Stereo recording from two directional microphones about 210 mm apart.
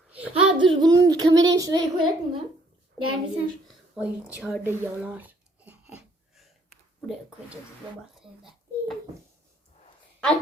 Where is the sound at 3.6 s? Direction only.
5° right (ahead or behind).